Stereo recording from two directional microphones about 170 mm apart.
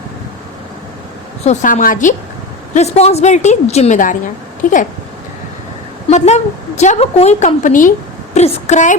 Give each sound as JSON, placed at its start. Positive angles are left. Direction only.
{"t": 1.5, "sound": "a woman's voice", "side_deg": 50}
{"t": 2.7, "sound": "a woman's voice", "side_deg": 40}
{"t": 6.1, "sound": "a woman's voice", "side_deg": 40}
{"t": 8.4, "sound": "a woman's voice", "side_deg": 35}